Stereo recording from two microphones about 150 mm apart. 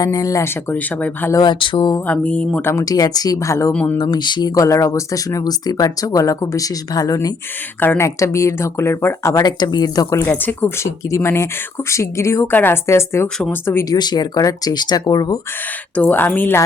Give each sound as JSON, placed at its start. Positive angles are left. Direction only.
{"t": 0.0, "sound": "speech", "side_deg": 25}
{"t": 1.3, "sound": "speech", "side_deg": 30}
{"t": 2.0, "sound": "speech", "side_deg": 10}
{"t": 2.6, "sound": "speech", "side_deg": 20}
{"t": 3.7, "sound": "speech", "side_deg": 10}
{"t": 3.9, "sound": "speech", "side_deg": 25}
{"t": 9.3, "sound": "speech", "side_deg": 25}
{"t": 13.2, "sound": "speech", "side_deg": 5}
{"t": 13.7, "sound": "speech", "side_deg": 15}
{"t": 14.0, "sound": "speech", "side_deg": 30}
{"t": 16.0, "sound": "speech", "side_deg": 15}